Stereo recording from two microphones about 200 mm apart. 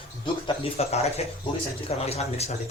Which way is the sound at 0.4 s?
30° left (ahead or behind).